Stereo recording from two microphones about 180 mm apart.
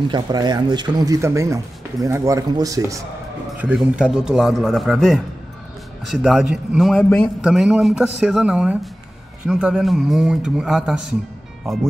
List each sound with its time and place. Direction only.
0.1 s speech: 25° right (ahead or behind)
3.5 s a man's voice: 5° right (ahead or behind)